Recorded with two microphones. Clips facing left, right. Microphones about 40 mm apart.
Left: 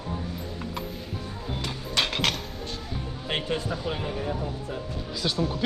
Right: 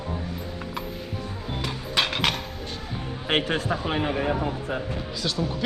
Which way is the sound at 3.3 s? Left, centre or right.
Right.